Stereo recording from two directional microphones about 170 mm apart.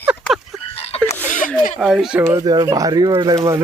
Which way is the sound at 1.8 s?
Centre (ahead or behind).